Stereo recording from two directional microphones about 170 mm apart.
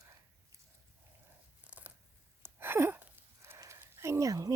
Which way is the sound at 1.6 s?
10° right (ahead or behind).